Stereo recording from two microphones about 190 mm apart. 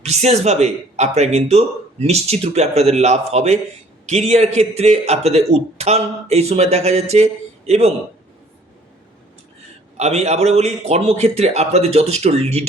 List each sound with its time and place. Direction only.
0.0 s a man's voice: 35° right (ahead or behind)
10.0 s a man's voice: 35° right (ahead or behind)